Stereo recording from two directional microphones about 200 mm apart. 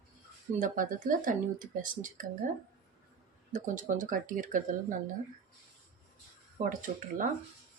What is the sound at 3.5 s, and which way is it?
Speech, 40° right (ahead or behind).